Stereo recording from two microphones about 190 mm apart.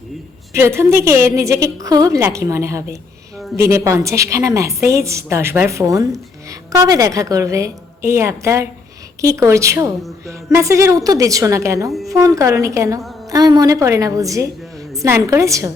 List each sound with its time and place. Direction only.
0.5 s a woman's voice: 15° right (ahead or behind)